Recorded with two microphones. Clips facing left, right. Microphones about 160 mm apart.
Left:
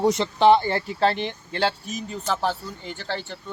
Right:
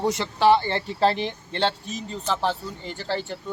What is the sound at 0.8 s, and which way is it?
Speech, centre (ahead or behind).